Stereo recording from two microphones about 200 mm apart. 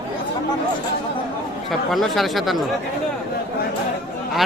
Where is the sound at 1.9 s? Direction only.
Centre (ahead or behind).